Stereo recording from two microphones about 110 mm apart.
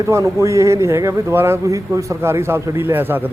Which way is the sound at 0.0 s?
30° right (ahead or behind).